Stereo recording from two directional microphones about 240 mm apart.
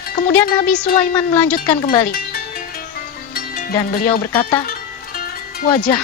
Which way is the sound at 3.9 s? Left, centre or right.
Left.